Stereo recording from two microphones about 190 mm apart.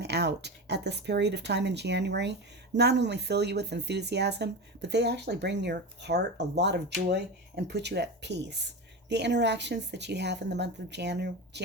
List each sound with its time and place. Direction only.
0.0 s speech: 60° right (ahead or behind)